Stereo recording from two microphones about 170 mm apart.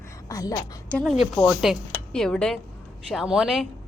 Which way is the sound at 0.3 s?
20° left (ahead or behind).